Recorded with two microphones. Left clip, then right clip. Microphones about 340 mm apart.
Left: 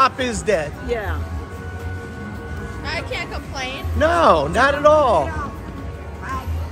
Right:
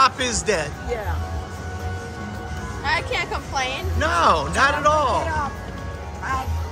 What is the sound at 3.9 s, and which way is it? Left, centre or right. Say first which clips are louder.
Speech: left 4 dB; centre.